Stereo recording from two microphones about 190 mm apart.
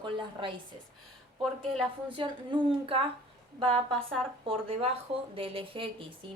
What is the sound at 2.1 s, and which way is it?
Speech, 25° right (ahead or behind).